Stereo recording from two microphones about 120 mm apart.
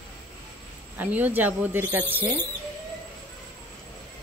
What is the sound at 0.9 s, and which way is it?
Speech, 15° right (ahead or behind).